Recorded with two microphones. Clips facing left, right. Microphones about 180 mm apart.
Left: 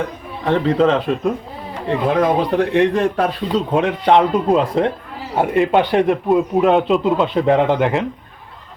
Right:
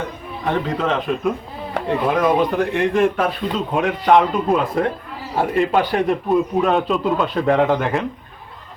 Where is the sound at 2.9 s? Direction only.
35° left (ahead or behind).